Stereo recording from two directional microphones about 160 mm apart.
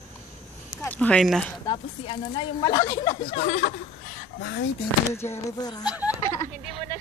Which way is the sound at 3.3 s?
50° left (ahead or behind).